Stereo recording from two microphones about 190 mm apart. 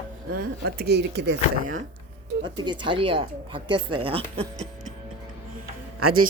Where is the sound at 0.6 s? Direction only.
60° right (ahead or behind).